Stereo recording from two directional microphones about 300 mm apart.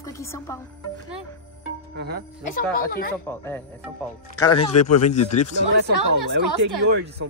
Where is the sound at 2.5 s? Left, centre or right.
Left.